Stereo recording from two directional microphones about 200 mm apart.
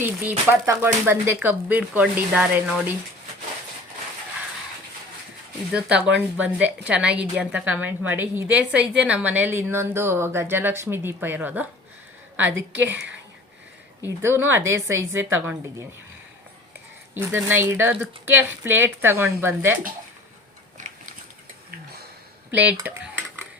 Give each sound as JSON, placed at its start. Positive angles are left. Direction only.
{"t": 0.0, "sound": "a woman's voice", "side_deg": -10}
{"t": 5.7, "sound": "a woman's voice", "side_deg": -5}
{"t": 14.2, "sound": "a woman's voice", "side_deg": -10}
{"t": 17.2, "sound": "a woman's voice", "side_deg": -10}
{"t": 20.8, "sound": "a sound", "side_deg": -40}
{"t": 22.5, "sound": "a woman's voice", "side_deg": -10}